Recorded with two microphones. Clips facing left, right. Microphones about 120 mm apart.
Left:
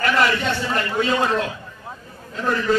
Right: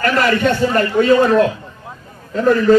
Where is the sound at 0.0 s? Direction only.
50° right (ahead or behind).